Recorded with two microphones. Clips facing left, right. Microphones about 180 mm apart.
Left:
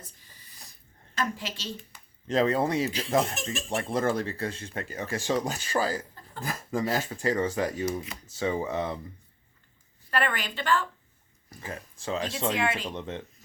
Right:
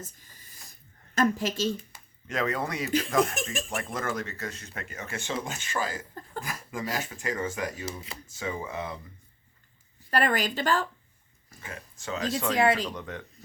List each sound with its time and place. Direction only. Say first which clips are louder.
0.0 s a sound: right 7 dB; 45° right (ahead or behind)
1.1 s a woman's voice: right 7 dB; 45° right (ahead or behind)
2.2 s speech: left 5 dB; 30° left (ahead or behind)
7.9 s speech: left 7 dB; 30° right (ahead or behind)
8.4 s speech: left 5 dB; 30° left (ahead or behind)
10.1 s a woman's voice: right 3 dB; 40° right (ahead or behind)
11.4 s speech: left 4 dB; 30° left (ahead or behind)
12.5 s a woman's voice: right 5 dB; 35° right (ahead or behind)
12.9 s speech: left 2 dB; 25° left (ahead or behind)